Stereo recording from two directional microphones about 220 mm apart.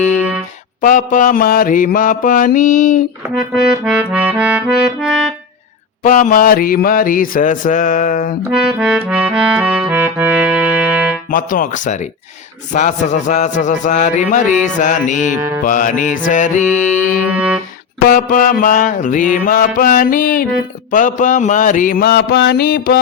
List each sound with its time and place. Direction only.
0.2 s music: 5° right (ahead or behind)
0.8 s mantra: 35° left (ahead or behind)
3.5 s music: 5° right (ahead or behind)
6.0 s mantra: 35° left (ahead or behind)
8.8 s music: 5° right (ahead or behind)
11.3 s mantra: 40° left (ahead or behind)
15.4 s music: 10° right (ahead or behind)
15.6 s mantra: 35° left (ahead or behind)
17.2 s music: 5° right (ahead or behind)
18.1 s mantra: 35° left (ahead or behind)